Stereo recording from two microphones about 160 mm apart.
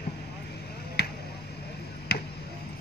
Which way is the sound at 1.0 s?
90° left.